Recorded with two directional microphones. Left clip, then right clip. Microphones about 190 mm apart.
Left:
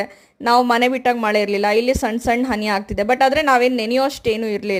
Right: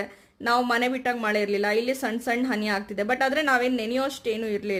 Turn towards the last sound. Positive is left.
turn(degrees=30)  # may be behind; listen again after turning